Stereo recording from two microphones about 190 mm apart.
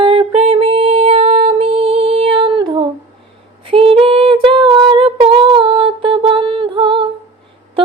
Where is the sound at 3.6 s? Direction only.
30° right (ahead or behind).